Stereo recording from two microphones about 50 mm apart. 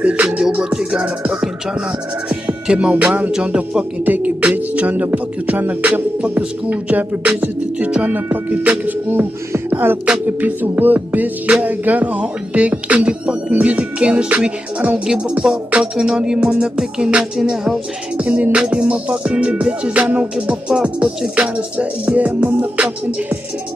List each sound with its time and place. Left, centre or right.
0.0 s music: right
0.6 s music: centre
1.0 s music: right
3.3 s a man's voice: centre
4.0 s music: right; by 17.7 s centre
18.1 s music: right